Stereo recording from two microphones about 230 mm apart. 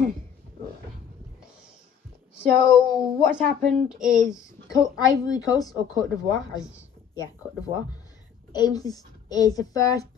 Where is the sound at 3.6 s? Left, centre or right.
Centre.